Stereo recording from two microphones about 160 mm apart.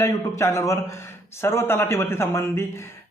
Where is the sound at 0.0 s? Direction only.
20° left (ahead or behind).